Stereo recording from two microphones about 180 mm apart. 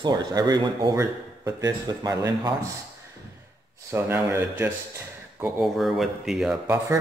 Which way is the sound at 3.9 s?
15° right (ahead or behind).